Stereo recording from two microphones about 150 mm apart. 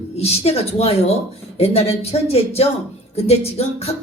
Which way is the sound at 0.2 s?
45° left (ahead or behind).